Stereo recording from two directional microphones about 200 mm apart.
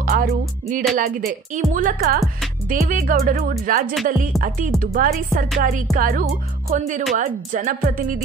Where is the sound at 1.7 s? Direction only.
45° right (ahead or behind).